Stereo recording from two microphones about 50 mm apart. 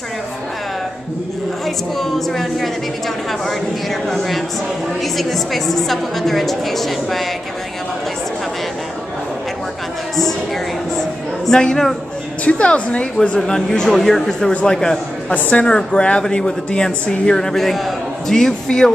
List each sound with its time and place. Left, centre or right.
2.0 s a woman's voice: centre
4.1 s a woman's voice: centre
11.0 s a woman's voice: centre
12.4 s a woman's voice: left
13.8 s a woman's voice: centre